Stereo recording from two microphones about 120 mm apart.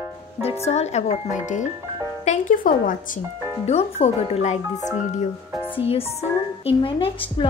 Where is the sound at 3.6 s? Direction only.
60° left (ahead or behind).